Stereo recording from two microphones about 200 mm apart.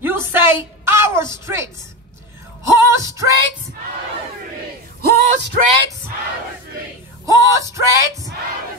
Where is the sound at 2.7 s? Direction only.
15° right (ahead or behind).